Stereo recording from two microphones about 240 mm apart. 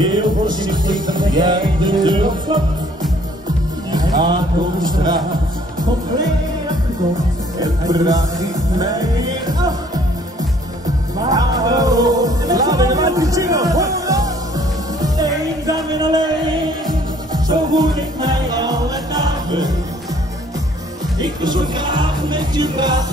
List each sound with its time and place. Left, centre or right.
0.0 s speech: centre
1.0 s music: centre
3.9 s music: centre
7.6 s music: centre
11.2 s music: centre
21.2 s music: centre